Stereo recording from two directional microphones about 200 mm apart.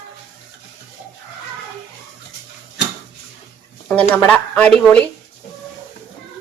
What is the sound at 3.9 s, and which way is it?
Speech, 10° left (ahead or behind).